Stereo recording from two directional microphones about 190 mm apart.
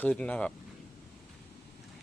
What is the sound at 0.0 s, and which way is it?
Speech, 5° left (ahead or behind).